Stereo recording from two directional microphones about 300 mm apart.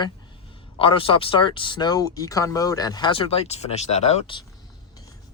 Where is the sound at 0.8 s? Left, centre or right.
Centre.